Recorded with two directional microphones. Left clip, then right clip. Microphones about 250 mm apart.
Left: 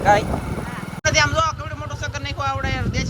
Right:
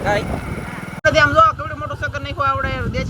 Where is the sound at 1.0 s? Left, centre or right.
Centre.